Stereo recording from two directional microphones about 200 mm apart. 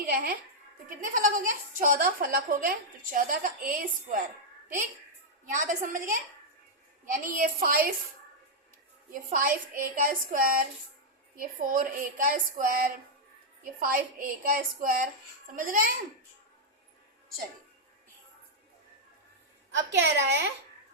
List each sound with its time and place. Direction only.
0.0 s a woman's voice: 50° right (ahead or behind)
5.5 s a woman's voice: 40° right (ahead or behind)
9.3 s speech: 45° right (ahead or behind)
19.7 s a woman's voice: 60° right (ahead or behind)